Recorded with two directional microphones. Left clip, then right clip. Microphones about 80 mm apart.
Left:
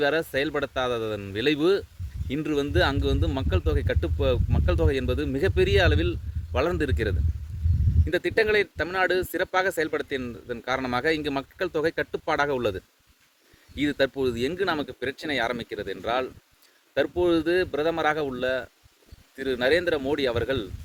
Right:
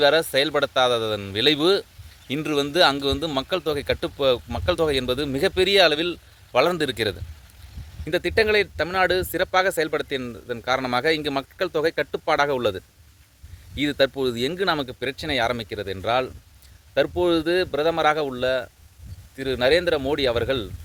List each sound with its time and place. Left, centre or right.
0.0 s speech: left